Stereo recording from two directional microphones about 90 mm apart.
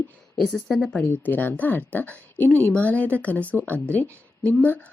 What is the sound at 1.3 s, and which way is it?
A woman's voice, 20° left (ahead or behind).